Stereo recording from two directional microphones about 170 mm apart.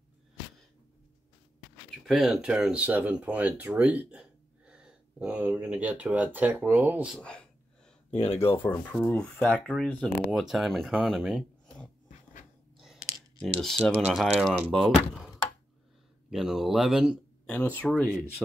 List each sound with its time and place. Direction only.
2.0 s speech: centre (ahead or behind)
7.2 s speech: 5° left (ahead or behind)
8.1 s speech: 35° left (ahead or behind)
8.6 s speech: 10° left (ahead or behind)
12.7 s a sound: centre (ahead or behind)
13.6 s speech: centre (ahead or behind)
17.5 s speech: 10° left (ahead or behind)